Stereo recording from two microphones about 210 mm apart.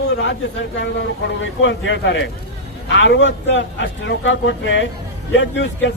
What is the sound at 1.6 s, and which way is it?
A man's voice, 60° left (ahead or behind).